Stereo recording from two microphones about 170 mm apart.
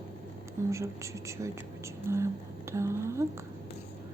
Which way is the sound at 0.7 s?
15° right (ahead or behind).